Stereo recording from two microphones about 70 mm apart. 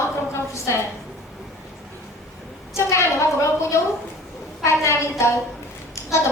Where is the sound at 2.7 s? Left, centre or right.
Left.